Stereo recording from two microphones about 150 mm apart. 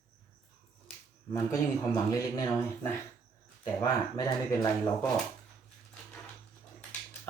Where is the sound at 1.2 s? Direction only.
20° left (ahead or behind).